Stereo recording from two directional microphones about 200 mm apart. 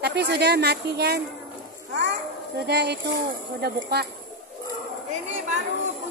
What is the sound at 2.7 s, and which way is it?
A woman's voice, 55° right (ahead or behind).